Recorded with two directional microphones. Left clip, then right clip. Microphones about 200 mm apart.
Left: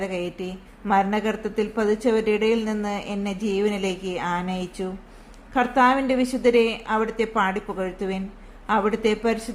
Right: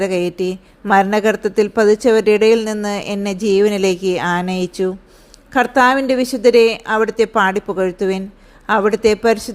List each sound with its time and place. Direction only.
0.0 s a woman's voice: 35° right (ahead or behind)